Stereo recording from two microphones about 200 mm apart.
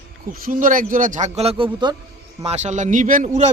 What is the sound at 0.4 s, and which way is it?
A man's voice, 45° right (ahead or behind).